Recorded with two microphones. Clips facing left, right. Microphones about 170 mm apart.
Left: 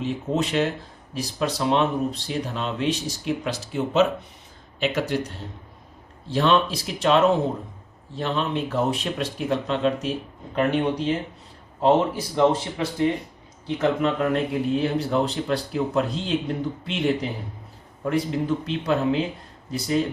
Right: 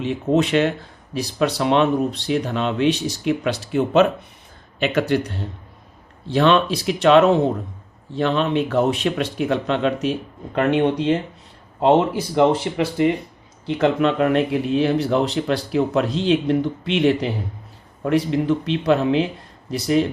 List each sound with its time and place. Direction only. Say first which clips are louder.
0.0 s speech: right 6 dB; 70° right (ahead or behind)
12.4 s speech: right 3 dB; 75° right (ahead or behind)